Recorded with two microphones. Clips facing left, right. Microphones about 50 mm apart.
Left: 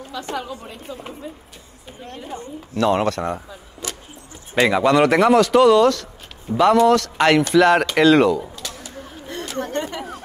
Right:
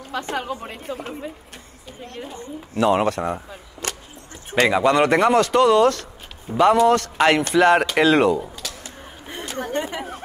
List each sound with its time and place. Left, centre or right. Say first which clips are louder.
0.1 s a woman's voice: right 2 dB; right
0.9 s speech: right 3 dB; right
2.8 s speech: even; centre
3.8 s a sound: right 2 dB; right
4.6 s speech: left 2 dB; centre
9.3 s speech: left 1 dB; centre